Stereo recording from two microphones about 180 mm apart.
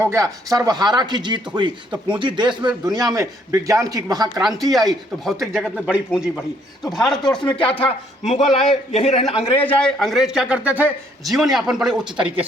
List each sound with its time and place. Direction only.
0.0 s speech: 15° right (ahead or behind)
4.4 s a man's voice: centre (ahead or behind)
7.9 s a man's voice: 35° left (ahead or behind)
9.6 s a man's voice: 10° left (ahead or behind)